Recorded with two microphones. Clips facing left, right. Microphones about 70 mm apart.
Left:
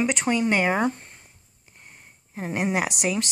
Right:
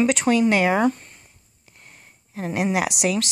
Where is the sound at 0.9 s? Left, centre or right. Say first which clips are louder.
Right 3 dB; left.